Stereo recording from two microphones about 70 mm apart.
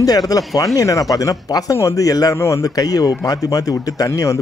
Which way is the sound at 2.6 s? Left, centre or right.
Left.